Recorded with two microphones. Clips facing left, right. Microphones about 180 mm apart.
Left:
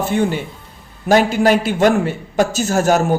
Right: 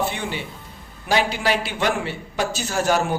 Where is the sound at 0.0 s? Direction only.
45° left (ahead or behind).